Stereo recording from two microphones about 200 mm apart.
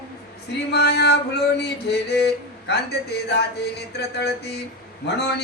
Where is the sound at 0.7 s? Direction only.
55° left (ahead or behind).